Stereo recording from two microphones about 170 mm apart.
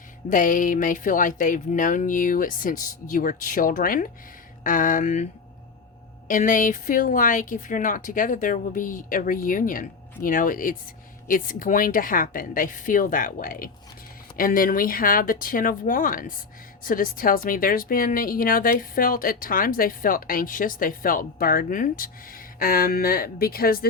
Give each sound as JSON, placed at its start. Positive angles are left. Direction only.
{"t": 0.3, "sound": "speech", "side_deg": 50}